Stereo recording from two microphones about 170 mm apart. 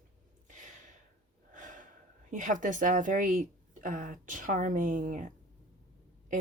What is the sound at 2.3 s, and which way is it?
A woman's voice, 50° right (ahead or behind).